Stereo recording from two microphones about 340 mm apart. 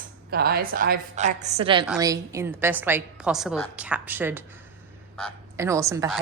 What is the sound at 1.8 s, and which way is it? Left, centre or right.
A woman's voice, centre.